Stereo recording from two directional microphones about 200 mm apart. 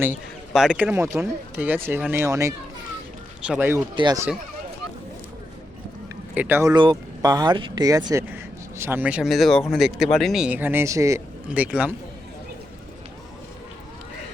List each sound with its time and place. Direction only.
0.0 s a man's voice: 5° right (ahead or behind)
3.9 s speech: 20° right (ahead or behind)
6.3 s speech: 10° right (ahead or behind)